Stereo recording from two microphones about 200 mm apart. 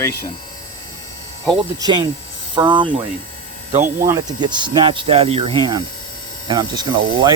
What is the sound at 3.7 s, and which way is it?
Speech, 35° right (ahead or behind).